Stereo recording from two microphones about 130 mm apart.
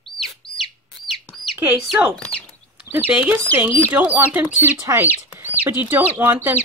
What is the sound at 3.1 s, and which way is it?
Speech, 10° right (ahead or behind).